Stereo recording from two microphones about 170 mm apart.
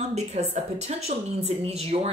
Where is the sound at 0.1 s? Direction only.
40° right (ahead or behind).